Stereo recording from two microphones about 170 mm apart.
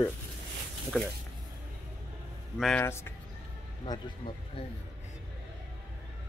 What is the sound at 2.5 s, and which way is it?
Speech, centre (ahead or behind).